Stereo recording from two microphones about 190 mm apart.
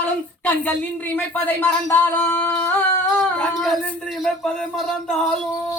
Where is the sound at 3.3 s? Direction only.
Centre (ahead or behind).